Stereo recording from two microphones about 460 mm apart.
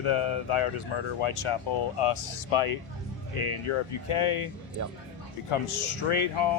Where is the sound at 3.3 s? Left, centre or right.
Left.